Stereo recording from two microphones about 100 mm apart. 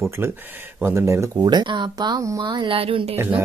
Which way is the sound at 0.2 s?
20° right (ahead or behind).